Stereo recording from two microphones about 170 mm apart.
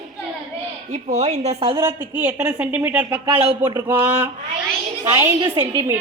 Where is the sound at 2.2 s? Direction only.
10° right (ahead or behind).